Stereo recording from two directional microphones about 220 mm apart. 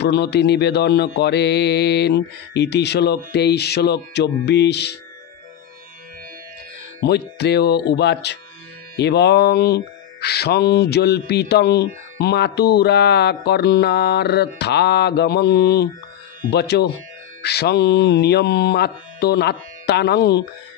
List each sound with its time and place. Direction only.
0.0 s mantra: 50° left (ahead or behind)
7.1 s mantra: 50° left (ahead or behind)